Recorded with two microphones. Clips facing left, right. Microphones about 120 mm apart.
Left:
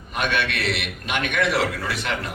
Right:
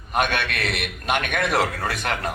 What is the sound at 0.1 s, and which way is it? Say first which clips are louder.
A man's voice: right 1 dB; 50° right (ahead or behind).